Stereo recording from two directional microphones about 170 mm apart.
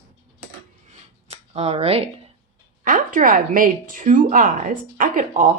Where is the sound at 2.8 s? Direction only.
55° right (ahead or behind).